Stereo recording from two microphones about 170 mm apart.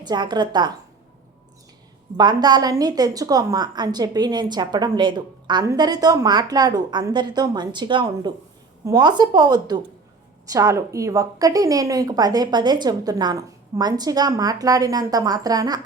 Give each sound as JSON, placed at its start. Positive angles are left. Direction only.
{"t": 0.0, "sound": "a woman's voice", "side_deg": -25}
{"t": 2.1, "sound": "a woman's voice", "side_deg": -25}